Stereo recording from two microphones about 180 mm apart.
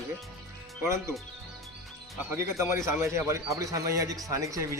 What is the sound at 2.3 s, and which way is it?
A man's voice, 15° right (ahead or behind).